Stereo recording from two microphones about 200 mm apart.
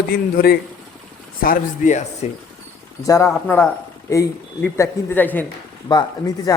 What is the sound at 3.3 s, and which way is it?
A man's voice, 5° left (ahead or behind).